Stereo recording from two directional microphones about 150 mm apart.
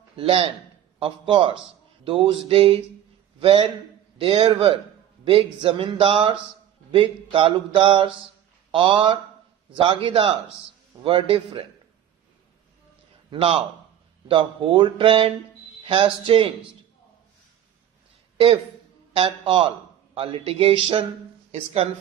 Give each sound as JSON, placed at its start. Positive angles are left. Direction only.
{"t": 0.1, "sound": "a man's voice", "side_deg": -40}
{"t": 13.3, "sound": "speech", "side_deg": -35}
{"t": 19.1, "sound": "speech", "side_deg": -35}